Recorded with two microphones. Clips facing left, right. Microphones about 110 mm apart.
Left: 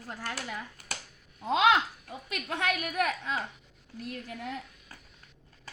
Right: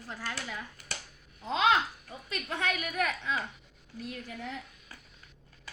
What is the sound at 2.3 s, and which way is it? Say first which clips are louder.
Speech: left 1 dB; 75° left (ahead or behind).